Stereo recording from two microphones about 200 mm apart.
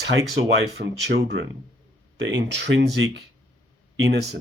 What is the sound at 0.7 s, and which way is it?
Speech, 60° right (ahead or behind).